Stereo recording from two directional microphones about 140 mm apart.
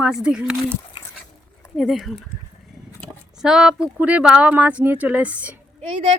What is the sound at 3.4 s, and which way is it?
A woman's voice, 5° right (ahead or behind).